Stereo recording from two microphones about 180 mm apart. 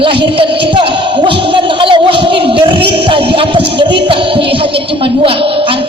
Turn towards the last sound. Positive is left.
turn(degrees=-30)  # may be behind; listen again after turning